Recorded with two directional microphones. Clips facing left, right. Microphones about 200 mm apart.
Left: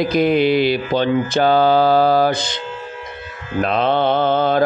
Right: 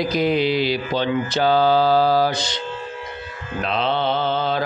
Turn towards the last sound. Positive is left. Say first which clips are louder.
# left 6 dB
turn(degrees=50)  # may be behind; listen again after turning